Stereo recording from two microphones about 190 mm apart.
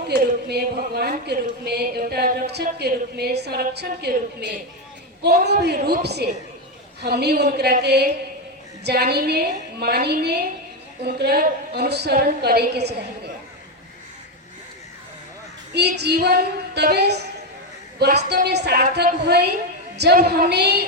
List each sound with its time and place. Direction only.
0.1 s speech: 60° right (ahead or behind)
15.7 s speech: 60° right (ahead or behind)
18.3 s speech: 60° right (ahead or behind)